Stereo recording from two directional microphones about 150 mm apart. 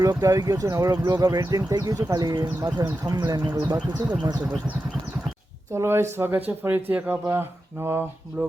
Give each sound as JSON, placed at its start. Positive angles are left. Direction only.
{"t": 0.0, "sound": "speech", "side_deg": -25}
{"t": 5.7, "sound": "speech", "side_deg": -15}